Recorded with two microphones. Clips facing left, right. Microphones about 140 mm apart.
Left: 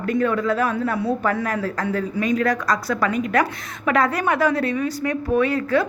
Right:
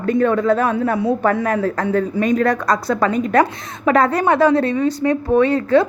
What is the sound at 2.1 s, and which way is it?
Speech, 45° right (ahead or behind).